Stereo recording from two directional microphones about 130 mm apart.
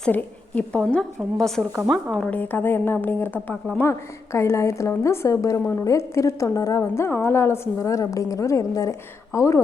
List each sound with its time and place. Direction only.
0.0 s a woman's voice: 10° left (ahead or behind)